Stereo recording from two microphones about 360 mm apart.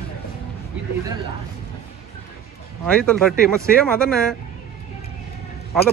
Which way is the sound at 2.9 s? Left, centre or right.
Centre.